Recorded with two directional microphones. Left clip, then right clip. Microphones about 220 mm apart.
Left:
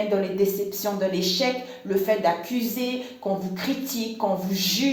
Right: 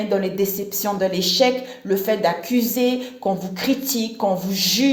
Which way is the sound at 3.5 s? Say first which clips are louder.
Right 6 dB; 50° right (ahead or behind).